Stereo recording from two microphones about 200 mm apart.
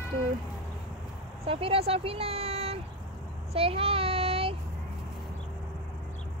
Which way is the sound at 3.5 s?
30° right (ahead or behind).